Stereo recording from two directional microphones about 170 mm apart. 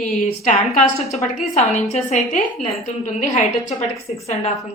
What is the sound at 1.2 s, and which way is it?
A woman's voice, 40° left (ahead or behind).